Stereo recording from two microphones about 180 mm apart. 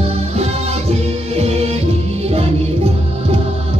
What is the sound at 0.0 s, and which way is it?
Music, 35° right (ahead or behind).